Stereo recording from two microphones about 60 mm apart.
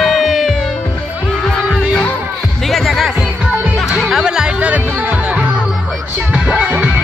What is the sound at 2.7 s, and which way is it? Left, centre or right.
Music, centre.